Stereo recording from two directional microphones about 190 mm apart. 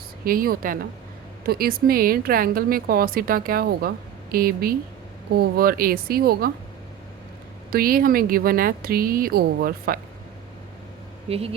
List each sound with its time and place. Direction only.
0.3 s a woman's voice: 50° right (ahead or behind)
7.7 s a woman's voice: 50° right (ahead or behind)
11.3 s speech: 30° right (ahead or behind)